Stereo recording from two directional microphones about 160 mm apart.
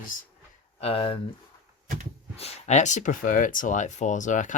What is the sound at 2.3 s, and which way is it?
Speech, 40° left (ahead or behind).